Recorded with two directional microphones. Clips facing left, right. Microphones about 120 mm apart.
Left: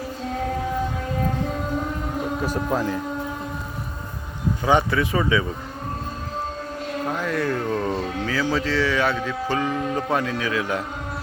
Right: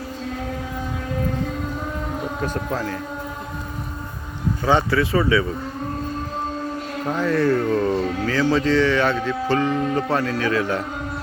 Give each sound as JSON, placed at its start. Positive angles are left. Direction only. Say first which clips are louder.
{"t": 2.4, "sound": "speech", "louder": "left 2 dB", "side_deg": 10}
{"t": 4.6, "sound": "speech", "louder": "right 1 dB", "side_deg": 15}
{"t": 7.1, "sound": "speech", "louder": "right 7 dB", "side_deg": 10}